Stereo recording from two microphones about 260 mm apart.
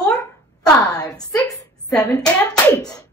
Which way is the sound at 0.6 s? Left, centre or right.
Centre.